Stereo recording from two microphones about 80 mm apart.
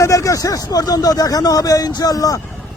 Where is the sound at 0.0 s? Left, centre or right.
Left.